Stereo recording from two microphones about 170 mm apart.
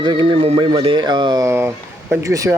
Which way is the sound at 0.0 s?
25° right (ahead or behind).